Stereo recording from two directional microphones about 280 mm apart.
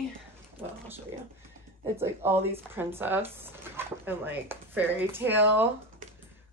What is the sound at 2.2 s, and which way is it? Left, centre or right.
Speech, centre.